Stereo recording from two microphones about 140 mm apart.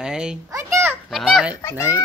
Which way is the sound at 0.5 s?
20° right (ahead or behind).